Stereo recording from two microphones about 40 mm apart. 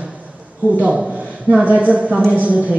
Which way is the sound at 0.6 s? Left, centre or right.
Right.